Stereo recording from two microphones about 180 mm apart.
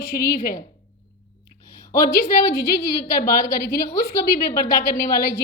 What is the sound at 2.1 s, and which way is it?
Speech, 60° left (ahead or behind).